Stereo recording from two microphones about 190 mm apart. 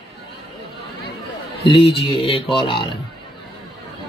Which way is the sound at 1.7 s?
30° left (ahead or behind).